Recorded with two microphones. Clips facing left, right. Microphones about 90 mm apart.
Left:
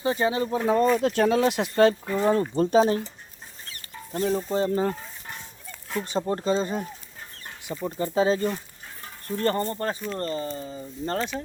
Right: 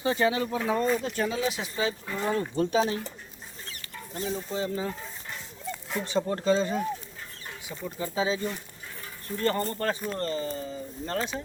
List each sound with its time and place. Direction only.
0.0 s speech: 25° left (ahead or behind)
0.5 s speech: 40° left (ahead or behind)
0.9 s speech: 65° left (ahead or behind)
2.0 s speech: 35° left (ahead or behind)
4.1 s speech: 45° left (ahead or behind)
6.1 s speech: 30° left (ahead or behind)
7.9 s speech: 50° left (ahead or behind)
9.2 s speech: 40° left (ahead or behind)
9.7 s speech: 25° left (ahead or behind)